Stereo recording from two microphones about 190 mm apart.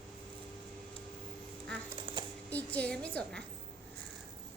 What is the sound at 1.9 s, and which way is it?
Typing, 25° right (ahead or behind).